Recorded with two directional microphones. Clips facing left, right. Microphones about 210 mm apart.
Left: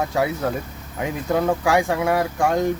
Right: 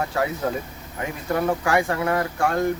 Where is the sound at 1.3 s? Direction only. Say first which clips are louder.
Left 2 dB; 15° left (ahead or behind).